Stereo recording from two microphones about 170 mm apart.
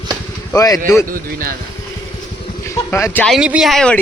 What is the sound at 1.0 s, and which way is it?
Speech, 55° right (ahead or behind).